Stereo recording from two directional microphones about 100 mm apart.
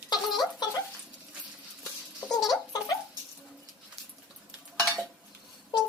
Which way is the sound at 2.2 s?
40° left (ahead or behind).